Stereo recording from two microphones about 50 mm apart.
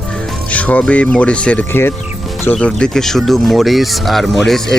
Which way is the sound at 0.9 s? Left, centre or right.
Left.